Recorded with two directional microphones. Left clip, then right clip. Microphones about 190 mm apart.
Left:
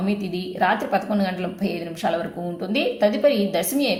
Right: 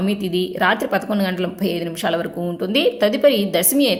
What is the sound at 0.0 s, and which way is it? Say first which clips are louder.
A woman's voice: right 6 dB; 35° right (ahead or behind).